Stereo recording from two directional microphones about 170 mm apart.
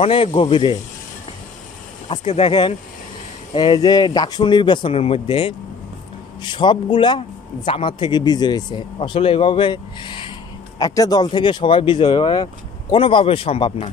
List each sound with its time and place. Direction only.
0.0 s a man's voice: 30° left (ahead or behind)
2.0 s a man's voice: 35° left (ahead or behind)